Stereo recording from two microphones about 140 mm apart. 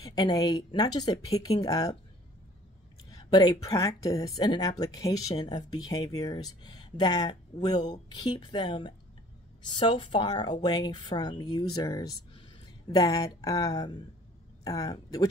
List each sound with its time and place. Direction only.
0.0 s speech: 30° left (ahead or behind)
3.1 s speech: 25° left (ahead or behind)